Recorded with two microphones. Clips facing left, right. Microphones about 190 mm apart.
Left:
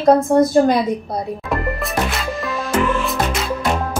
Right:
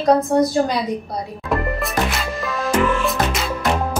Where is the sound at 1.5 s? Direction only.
Centre (ahead or behind).